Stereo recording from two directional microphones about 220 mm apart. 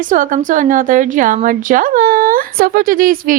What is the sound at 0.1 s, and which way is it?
A woman's voice, 35° right (ahead or behind).